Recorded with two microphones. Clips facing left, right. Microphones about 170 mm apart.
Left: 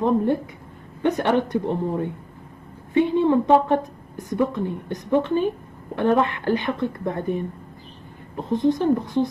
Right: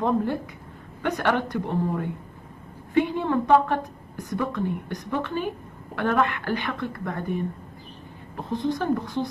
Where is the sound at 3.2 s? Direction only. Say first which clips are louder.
Left 3 dB; 20° left (ahead or behind).